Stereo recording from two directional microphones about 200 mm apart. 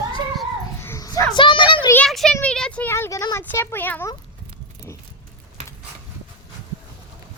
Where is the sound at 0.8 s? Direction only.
15° left (ahead or behind).